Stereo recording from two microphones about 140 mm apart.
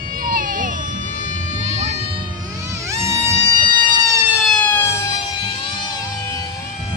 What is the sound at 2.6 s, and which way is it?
Music, 20° right (ahead or behind).